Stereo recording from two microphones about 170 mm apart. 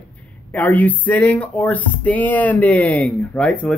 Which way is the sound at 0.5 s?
10° left (ahead or behind).